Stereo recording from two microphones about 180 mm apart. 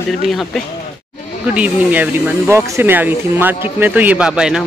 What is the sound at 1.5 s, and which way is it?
Speech, 5° right (ahead or behind).